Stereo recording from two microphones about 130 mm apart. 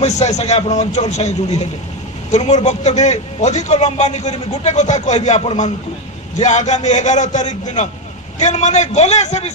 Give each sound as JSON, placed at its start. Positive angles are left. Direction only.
{"t": 0.0, "sound": "a man's voice", "side_deg": 60}